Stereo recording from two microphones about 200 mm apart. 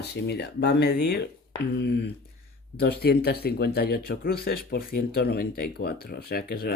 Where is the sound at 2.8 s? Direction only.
50° left (ahead or behind).